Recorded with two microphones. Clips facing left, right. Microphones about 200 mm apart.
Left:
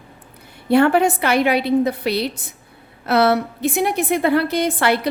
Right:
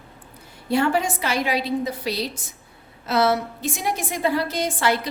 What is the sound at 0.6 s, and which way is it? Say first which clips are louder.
A woman's voice: left 7 dB; 60° left (ahead or behind).